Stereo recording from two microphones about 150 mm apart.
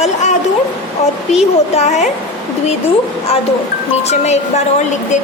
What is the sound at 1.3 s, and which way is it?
Speech, 50° left (ahead or behind).